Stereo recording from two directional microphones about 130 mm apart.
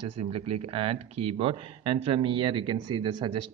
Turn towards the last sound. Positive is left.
turn(degrees=-35)  # may be behind; listen again after turning